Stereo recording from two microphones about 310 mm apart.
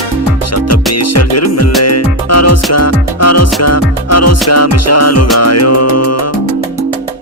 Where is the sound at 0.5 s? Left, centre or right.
Left.